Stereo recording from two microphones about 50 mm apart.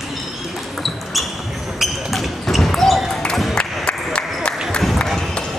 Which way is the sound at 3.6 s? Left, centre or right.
Centre.